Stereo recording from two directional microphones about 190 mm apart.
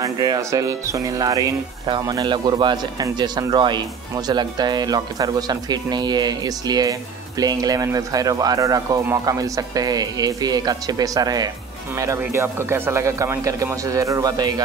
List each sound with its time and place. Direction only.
0.0 s speech: 20° right (ahead or behind)